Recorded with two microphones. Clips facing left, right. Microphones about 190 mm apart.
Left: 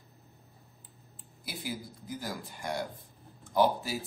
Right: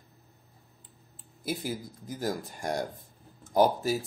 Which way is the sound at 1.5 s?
45° right (ahead or behind).